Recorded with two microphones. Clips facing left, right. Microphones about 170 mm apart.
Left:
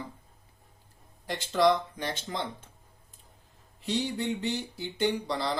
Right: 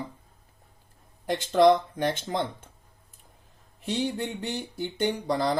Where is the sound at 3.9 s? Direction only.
50° right (ahead or behind).